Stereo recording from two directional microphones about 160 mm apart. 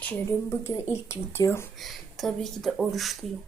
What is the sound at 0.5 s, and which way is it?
Speech, 15° left (ahead or behind).